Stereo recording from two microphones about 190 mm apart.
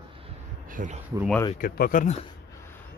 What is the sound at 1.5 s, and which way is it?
Speech, 50° left (ahead or behind).